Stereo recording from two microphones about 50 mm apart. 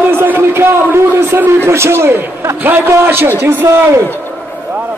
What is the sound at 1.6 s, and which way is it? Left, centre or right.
Speech, right.